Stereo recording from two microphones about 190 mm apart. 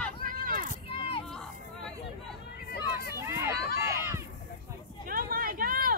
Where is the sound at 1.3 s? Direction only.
Centre (ahead or behind).